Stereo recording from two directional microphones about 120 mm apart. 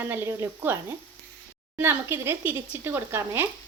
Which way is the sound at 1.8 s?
20° right (ahead or behind).